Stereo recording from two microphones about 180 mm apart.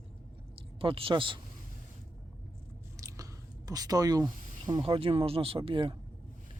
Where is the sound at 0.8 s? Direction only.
30° right (ahead or behind).